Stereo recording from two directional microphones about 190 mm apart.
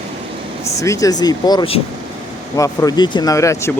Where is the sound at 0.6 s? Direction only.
15° left (ahead or behind).